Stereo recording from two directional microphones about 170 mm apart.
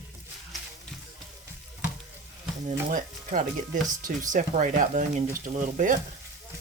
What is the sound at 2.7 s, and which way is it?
Speech, 50° right (ahead or behind).